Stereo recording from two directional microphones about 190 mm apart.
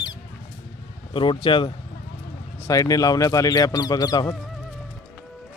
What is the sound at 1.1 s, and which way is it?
Speech, 25° left (ahead or behind).